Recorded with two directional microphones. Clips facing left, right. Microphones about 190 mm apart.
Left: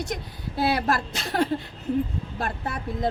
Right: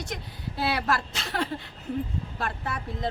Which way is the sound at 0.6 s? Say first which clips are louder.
Left 4 dB; 45° left (ahead or behind).